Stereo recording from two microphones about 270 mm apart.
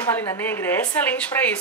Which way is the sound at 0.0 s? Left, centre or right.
Centre.